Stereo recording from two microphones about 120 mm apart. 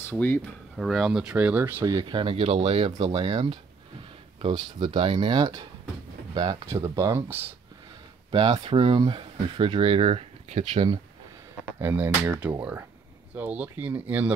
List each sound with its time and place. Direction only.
0.1 s speech: 15° left (ahead or behind)
0.7 s speech: centre (ahead or behind)
1.3 s speech: 15° right (ahead or behind)
2.0 s speech: 40° right (ahead or behind)
3.0 s speech: 40° right (ahead or behind)
6.3 s speech: 30° right (ahead or behind)
8.3 s speech: 45° right (ahead or behind)
11.8 s speech: 15° right (ahead or behind)